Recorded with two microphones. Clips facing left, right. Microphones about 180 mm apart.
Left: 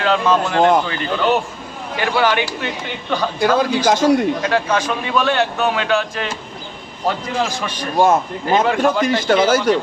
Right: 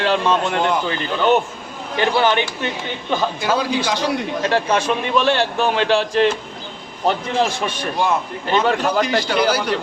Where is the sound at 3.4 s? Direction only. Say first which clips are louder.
Left 4 dB; 50° left (ahead or behind).